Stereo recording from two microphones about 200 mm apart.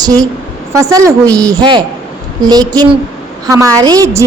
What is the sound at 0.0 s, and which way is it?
A woman's voice, 20° right (ahead or behind).